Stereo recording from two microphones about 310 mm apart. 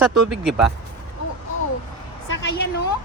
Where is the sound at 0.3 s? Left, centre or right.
Centre.